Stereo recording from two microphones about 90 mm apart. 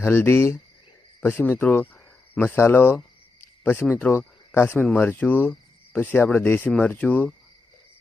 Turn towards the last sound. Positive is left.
turn(degrees=15)  # may be behind; listen again after turning